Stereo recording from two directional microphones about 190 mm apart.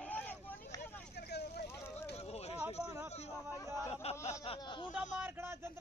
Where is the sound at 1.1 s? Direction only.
60° left (ahead or behind).